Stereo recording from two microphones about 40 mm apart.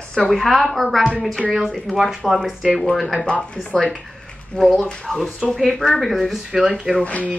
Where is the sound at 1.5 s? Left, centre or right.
Centre.